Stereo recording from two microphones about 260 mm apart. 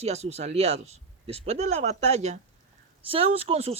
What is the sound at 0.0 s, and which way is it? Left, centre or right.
Speech, right.